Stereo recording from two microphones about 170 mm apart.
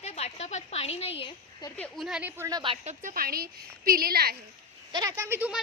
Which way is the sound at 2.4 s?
25° right (ahead or behind).